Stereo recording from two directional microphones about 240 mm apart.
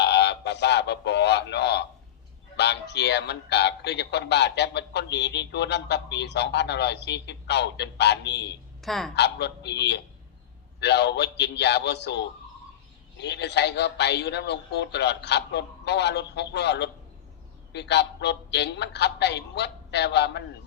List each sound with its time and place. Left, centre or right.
0.0 s a sound: left
2.6 s a man's voice: left
8.8 s a woman's voice: centre
9.1 s a man's voice: left